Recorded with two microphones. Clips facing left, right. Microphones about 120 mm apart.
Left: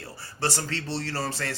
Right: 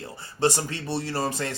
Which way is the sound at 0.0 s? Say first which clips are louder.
Right 6 dB; 20° right (ahead or behind).